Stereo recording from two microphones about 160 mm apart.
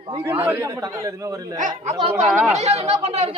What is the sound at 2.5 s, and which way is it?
Speech, 45° right (ahead or behind).